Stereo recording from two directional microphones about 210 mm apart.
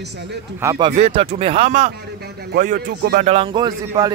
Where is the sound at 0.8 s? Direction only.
30° right (ahead or behind).